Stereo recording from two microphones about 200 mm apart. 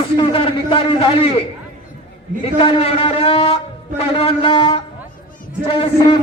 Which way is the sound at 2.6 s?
30° left (ahead or behind).